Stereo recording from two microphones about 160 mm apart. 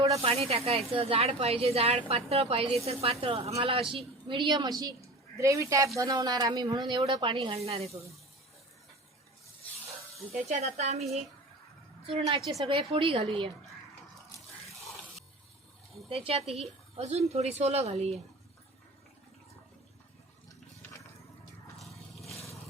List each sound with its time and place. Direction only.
0.2 s a man's voice: 40° right (ahead or behind)
10.3 s speech: 45° right (ahead or behind)
12.4 s a woman's voice: centre (ahead or behind)
12.6 s speech: 35° right (ahead or behind)
16.0 s speech: 35° right (ahead or behind)